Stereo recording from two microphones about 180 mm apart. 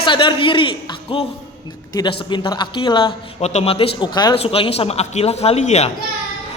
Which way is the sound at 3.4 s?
35° left (ahead or behind).